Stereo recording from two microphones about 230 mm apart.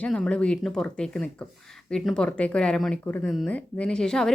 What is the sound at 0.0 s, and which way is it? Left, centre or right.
Speech, centre.